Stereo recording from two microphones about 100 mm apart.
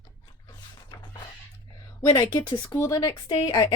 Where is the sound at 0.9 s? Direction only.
45° left (ahead or behind).